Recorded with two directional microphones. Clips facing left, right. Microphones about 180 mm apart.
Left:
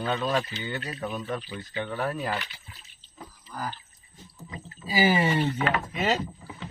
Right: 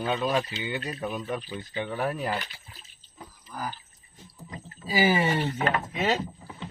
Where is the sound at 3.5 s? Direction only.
10° right (ahead or behind).